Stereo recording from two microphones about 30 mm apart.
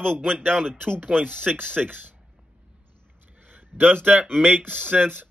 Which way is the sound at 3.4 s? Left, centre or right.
Right.